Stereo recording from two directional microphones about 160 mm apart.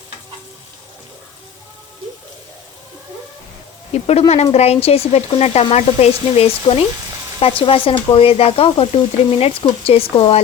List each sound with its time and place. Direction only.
3.9 s sizzle: 40° left (ahead or behind)